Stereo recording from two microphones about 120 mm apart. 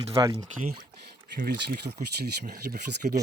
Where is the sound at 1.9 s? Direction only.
45° right (ahead or behind).